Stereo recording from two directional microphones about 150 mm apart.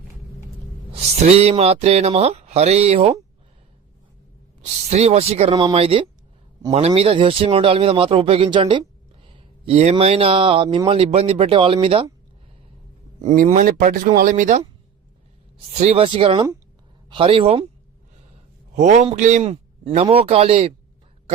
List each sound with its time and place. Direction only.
0.9 s speech: 45° right (ahead or behind)
4.9 s speech: 45° right (ahead or behind)
9.2 s a sound: 40° right (ahead or behind)
9.9 s speech: 40° right (ahead or behind)
13.2 s speech: 60° right (ahead or behind)
15.8 s speech: 45° right (ahead or behind)
18.8 s a man's voice: 50° right (ahead or behind)